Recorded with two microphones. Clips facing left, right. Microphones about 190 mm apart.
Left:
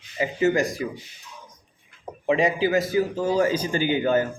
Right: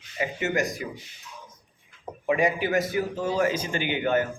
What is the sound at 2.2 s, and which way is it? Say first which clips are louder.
A man's voice: left 3 dB; 25° left (ahead or behind).